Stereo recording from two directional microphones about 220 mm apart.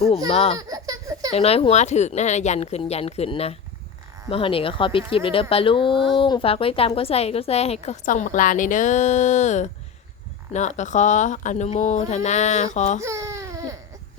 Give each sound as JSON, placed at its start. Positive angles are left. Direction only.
{"t": 0.3, "sound": "a woman's voice", "side_deg": 25}
{"t": 0.7, "sound": "a sound", "side_deg": -15}
{"t": 1.3, "sound": "a woman's voice", "side_deg": 30}
{"t": 13.0, "sound": "baby cry", "side_deg": -15}